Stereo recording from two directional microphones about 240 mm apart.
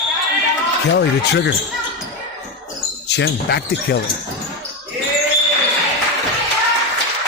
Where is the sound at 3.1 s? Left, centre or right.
Left.